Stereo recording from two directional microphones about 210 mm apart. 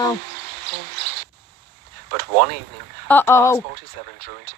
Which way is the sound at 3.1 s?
10° left (ahead or behind).